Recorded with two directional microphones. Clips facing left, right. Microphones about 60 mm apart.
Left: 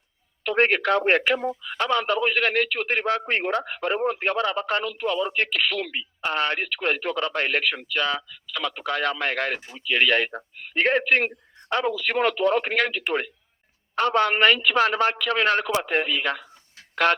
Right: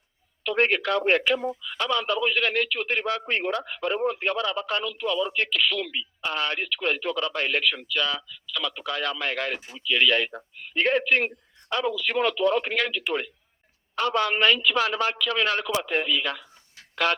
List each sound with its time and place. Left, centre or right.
0.4 s speech: left